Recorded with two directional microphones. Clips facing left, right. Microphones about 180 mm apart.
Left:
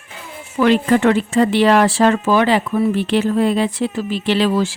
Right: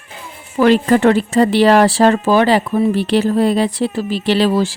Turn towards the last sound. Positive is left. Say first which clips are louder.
# right 2 dB
turn(degrees=-35)  # may be behind; listen again after turning